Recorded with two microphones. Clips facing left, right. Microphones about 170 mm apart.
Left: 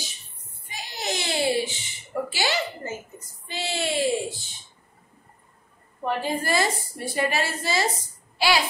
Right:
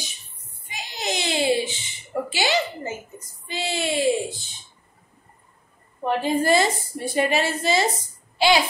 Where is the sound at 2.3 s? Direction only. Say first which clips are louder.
Right 5 dB; 20° right (ahead or behind).